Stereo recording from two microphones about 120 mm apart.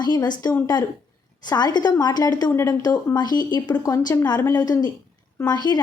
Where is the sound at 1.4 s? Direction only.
35° left (ahead or behind).